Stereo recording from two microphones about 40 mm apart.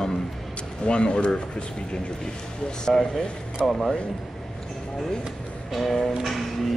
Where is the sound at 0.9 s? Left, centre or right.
Left.